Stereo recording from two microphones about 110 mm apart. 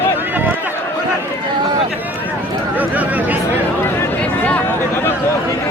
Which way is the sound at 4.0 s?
20° left (ahead or behind).